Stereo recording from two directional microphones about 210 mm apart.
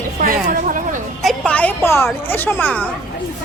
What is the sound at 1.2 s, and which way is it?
A woman's voice, 5° left (ahead or behind).